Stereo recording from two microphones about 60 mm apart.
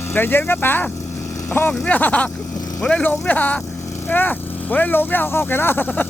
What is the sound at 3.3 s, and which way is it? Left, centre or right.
Speech, left.